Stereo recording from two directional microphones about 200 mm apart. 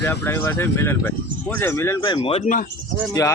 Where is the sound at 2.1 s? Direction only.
30° left (ahead or behind).